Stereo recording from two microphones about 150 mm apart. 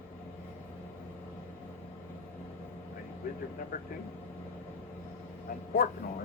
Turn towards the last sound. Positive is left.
turn(degrees=80)